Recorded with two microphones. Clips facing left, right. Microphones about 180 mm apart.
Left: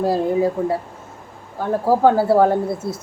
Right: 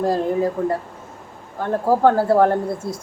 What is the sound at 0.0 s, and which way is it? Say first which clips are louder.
A woman's voice: left 1 dB; 5° left (ahead or behind).